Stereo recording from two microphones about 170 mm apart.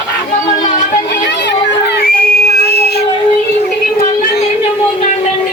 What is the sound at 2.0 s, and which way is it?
Whistle, 60° left (ahead or behind).